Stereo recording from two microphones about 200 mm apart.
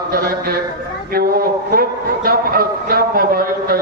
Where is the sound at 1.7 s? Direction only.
50° right (ahead or behind).